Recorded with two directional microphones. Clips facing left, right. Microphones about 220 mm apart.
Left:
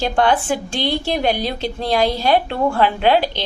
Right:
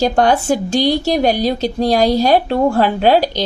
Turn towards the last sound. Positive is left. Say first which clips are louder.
# right 3 dB
turn(degrees=-40)  # may be behind; listen again after turning